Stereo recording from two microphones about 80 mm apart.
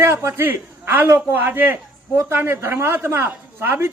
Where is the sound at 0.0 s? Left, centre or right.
Right.